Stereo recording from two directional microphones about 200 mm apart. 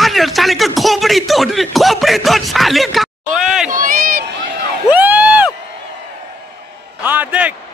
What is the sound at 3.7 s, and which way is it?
Run, 45° right (ahead or behind).